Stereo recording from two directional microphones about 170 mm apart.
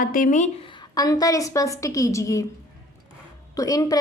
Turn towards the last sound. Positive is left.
turn(degrees=20)  # may be behind; listen again after turning